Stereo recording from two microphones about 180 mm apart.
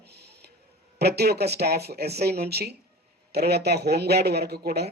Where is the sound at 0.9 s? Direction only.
65° right (ahead or behind).